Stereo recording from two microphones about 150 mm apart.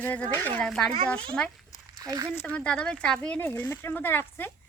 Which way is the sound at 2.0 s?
25° right (ahead or behind).